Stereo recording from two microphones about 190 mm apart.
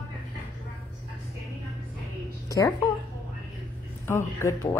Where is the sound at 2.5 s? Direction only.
15° left (ahead or behind).